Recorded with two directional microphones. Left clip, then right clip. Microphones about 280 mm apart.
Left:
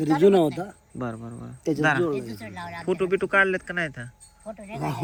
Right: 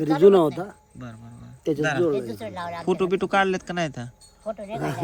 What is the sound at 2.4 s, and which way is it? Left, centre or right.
Speech, centre.